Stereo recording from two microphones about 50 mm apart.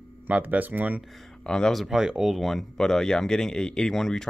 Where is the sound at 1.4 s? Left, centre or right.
Centre.